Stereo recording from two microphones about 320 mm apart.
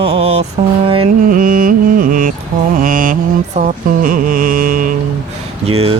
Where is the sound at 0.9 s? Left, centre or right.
Right.